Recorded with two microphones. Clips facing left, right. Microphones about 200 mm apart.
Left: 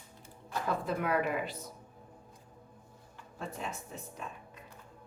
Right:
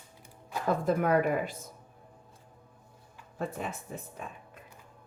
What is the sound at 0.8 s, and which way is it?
Speech, 45° right (ahead or behind).